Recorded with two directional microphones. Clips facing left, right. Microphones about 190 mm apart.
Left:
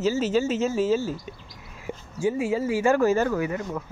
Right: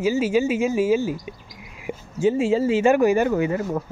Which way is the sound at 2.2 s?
25° right (ahead or behind).